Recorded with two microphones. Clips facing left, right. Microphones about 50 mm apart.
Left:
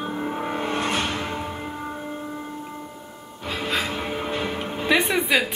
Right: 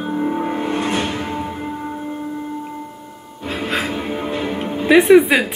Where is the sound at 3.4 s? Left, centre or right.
Right.